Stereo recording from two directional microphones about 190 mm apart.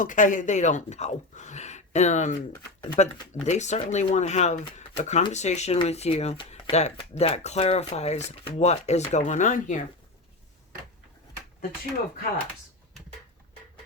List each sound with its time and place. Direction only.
0.0 s speech: 40° left (ahead or behind)